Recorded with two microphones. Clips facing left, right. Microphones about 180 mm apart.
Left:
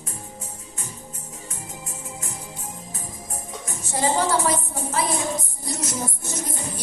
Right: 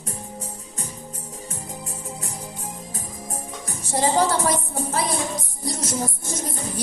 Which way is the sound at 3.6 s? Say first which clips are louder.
Right 1 dB; 35° right (ahead or behind).